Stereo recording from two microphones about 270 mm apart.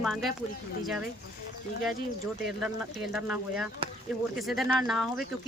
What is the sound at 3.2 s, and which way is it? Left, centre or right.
Speech, centre.